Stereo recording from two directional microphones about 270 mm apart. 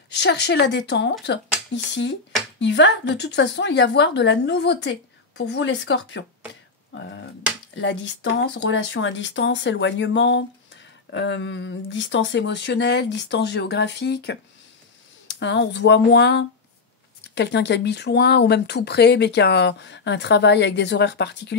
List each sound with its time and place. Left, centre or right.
0.2 s speech: left
6.9 s a sound: left
7.7 s speech: left